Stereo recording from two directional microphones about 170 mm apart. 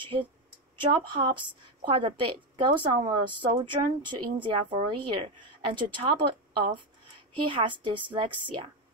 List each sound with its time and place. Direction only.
0.0 s speech: 30° right (ahead or behind)